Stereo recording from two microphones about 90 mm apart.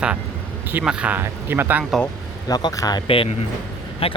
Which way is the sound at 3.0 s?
90° left.